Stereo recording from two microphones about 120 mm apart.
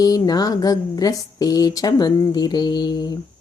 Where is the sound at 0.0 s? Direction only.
30° left (ahead or behind).